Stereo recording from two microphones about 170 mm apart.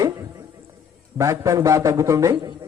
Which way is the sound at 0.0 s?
20° right (ahead or behind).